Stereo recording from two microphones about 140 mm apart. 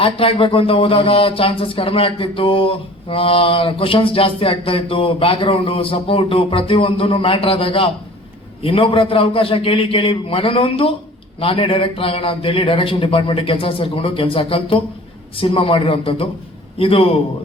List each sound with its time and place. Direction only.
0.0 s a man's voice: 40° left (ahead or behind)